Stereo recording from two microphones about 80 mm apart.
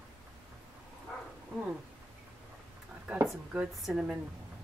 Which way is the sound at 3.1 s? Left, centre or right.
Centre.